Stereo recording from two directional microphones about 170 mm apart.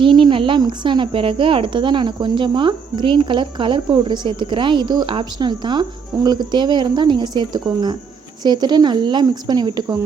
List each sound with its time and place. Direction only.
0.0 s speech: 30° right (ahead or behind)